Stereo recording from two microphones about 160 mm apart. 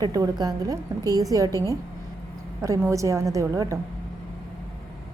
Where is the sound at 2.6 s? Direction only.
20° right (ahead or behind).